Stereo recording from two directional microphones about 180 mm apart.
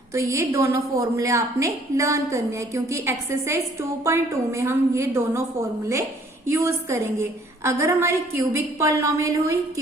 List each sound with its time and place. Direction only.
0.1 s a woman's voice: 15° right (ahead or behind)